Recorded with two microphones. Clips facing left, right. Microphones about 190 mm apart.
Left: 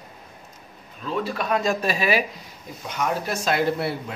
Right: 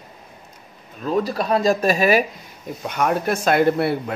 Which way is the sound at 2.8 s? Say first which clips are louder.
Right 5 dB; 55° right (ahead or behind).